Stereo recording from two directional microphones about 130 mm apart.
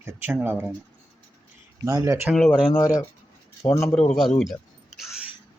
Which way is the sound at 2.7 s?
30° left (ahead or behind).